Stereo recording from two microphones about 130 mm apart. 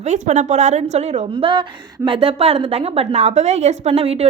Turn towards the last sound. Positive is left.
turn(degrees=-50)  # may be behind; listen again after turning